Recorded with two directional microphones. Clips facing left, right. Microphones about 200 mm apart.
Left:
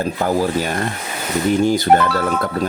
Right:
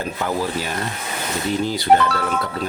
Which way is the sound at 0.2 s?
40° left (ahead or behind).